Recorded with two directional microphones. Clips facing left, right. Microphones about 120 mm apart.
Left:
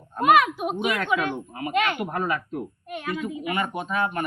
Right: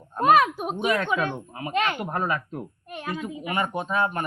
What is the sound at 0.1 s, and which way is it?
A woman's voice, 35° right (ahead or behind).